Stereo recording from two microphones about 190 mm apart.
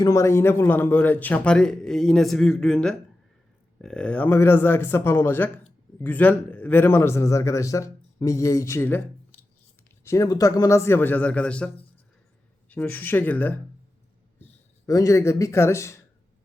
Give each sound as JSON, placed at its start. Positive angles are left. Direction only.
{"t": 0.0, "sound": "a man's voice", "side_deg": 15}
{"t": 10.0, "sound": "a man's voice", "side_deg": 15}
{"t": 14.8, "sound": "a man's voice", "side_deg": 15}